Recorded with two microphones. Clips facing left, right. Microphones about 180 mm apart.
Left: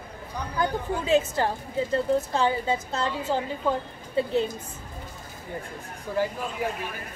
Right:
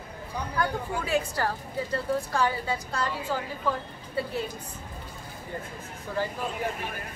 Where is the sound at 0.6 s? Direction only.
20° left (ahead or behind).